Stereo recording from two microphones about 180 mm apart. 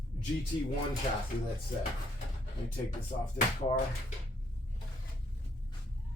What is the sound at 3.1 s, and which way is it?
Music, 40° left (ahead or behind).